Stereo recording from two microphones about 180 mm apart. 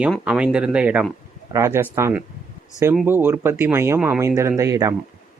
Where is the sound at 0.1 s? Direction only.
5° right (ahead or behind).